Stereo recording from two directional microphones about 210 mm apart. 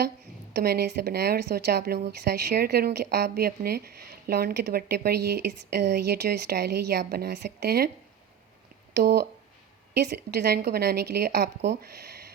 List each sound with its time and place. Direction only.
0.5 s speech: 50° right (ahead or behind)
9.0 s speech: 50° right (ahead or behind)